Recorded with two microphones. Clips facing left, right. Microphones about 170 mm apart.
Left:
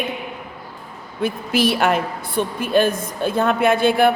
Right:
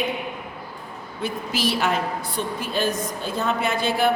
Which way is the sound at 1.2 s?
55° left (ahead or behind).